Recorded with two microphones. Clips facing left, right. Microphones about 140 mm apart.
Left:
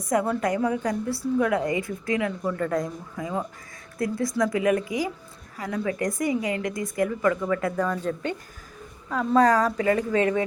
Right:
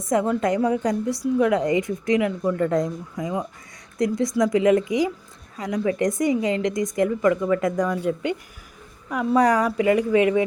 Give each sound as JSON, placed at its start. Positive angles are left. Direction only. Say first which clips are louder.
{"t": 0.0, "sound": "a woman's voice", "louder": "right 3 dB", "side_deg": -20}